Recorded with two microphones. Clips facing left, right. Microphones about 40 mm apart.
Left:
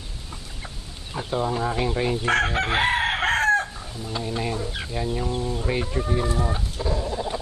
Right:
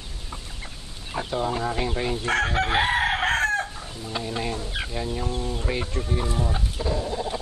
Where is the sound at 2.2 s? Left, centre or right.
Left.